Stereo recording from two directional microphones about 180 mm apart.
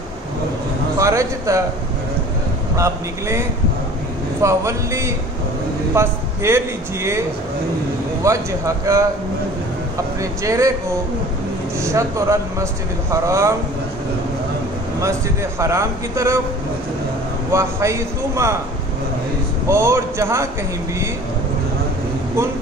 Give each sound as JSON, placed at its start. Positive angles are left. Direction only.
{"t": 0.9, "sound": "a man's voice", "side_deg": -15}
{"t": 2.7, "sound": "a man's voice", "side_deg": -15}
{"t": 10.4, "sound": "a man's voice", "side_deg": -15}
{"t": 11.8, "sound": "a man's voice", "side_deg": -15}
{"t": 15.6, "sound": "a man's voice", "side_deg": -15}
{"t": 17.5, "sound": "a man's voice", "side_deg": -15}
{"t": 19.7, "sound": "a man's voice", "side_deg": -15}